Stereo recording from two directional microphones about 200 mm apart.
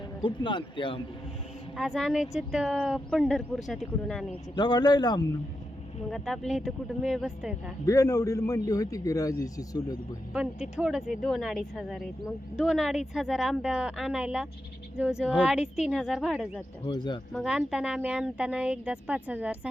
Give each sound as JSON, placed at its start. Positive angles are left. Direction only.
{"t": 0.2, "sound": "speech", "side_deg": 25}
{"t": 1.7, "sound": "speech", "side_deg": 0}
{"t": 4.5, "sound": "speech", "side_deg": 20}
{"t": 6.1, "sound": "speech", "side_deg": 0}
{"t": 7.9, "sound": "a man's voice", "side_deg": 15}
{"t": 10.3, "sound": "speech", "side_deg": -5}
{"t": 16.8, "sound": "speech", "side_deg": 20}
{"t": 17.3, "sound": "speech", "side_deg": 0}